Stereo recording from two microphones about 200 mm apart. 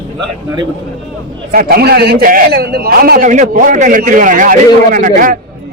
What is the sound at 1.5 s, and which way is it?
A man's voice, 50° right (ahead or behind).